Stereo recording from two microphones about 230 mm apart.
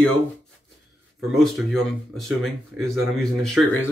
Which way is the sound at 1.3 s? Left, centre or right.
Centre.